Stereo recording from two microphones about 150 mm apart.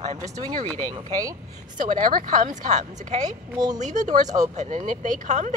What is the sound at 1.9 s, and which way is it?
Speech, 60° right (ahead or behind).